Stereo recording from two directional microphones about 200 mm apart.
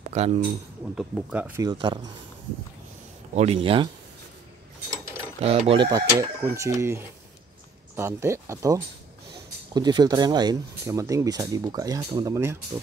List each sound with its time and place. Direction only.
0.1 s speech: 35° right (ahead or behind)
0.9 s speech: 5° right (ahead or behind)
1.6 s speech: 20° right (ahead or behind)
3.3 s speech: 30° right (ahead or behind)
5.4 s speech: 30° right (ahead or behind)